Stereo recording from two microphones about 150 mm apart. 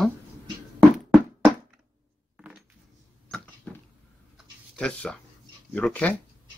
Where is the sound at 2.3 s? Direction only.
5° right (ahead or behind).